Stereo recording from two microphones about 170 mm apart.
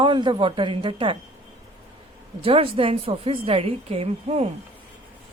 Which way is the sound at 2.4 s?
35° right (ahead or behind).